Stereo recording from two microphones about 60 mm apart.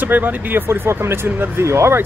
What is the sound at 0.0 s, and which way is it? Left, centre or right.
Speech, right.